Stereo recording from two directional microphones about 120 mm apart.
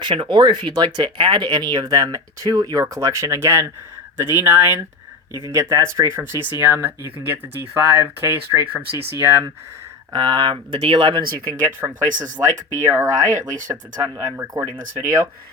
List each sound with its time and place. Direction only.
0.0 s speech: 40° right (ahead or behind); by 4.9 s 20° right (ahead or behind)
5.3 s speech: 35° left (ahead or behind)
5.5 s speech: 25° right (ahead or behind)
9.1 s speech: 25° right (ahead or behind)
10.1 s speech: 35° right (ahead or behind)
10.8 s speech: 50° right (ahead or behind)
11.3 s speech: 25° right (ahead or behind)